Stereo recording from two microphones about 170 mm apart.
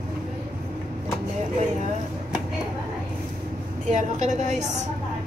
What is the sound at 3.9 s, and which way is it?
Speech, 45° right (ahead or behind).